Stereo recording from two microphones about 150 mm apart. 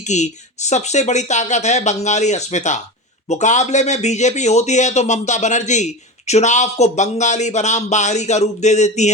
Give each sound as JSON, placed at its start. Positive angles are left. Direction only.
{"t": 0.1, "sound": "speech", "side_deg": 50}